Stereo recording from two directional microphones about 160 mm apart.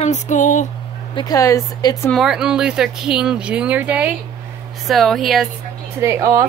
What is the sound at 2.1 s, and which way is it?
A woman's voice, centre (ahead or behind).